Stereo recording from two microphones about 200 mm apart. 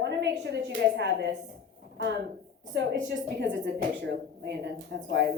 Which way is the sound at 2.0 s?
60° right (ahead or behind).